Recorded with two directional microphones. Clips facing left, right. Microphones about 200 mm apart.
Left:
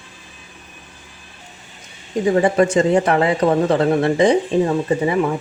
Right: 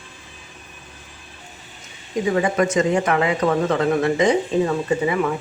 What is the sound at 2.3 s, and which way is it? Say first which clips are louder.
A man's voice: left 4 dB; 30° left (ahead or behind).